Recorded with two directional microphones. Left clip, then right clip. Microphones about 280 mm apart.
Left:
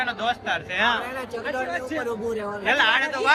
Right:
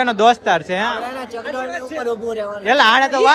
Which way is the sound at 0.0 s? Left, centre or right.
Centre.